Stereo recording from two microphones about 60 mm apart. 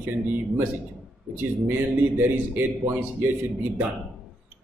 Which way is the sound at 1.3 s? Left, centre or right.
Right.